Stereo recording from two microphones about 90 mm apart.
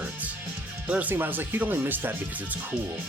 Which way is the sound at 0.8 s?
15° right (ahead or behind).